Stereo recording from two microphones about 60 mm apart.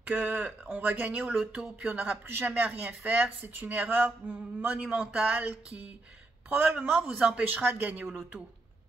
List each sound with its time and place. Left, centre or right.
0.0 s speech: right
1.3 s speech: centre
1.9 s speech: right
4.7 s speech: centre
5.2 s speech: right
6.8 s speech: centre
7.4 s speech: right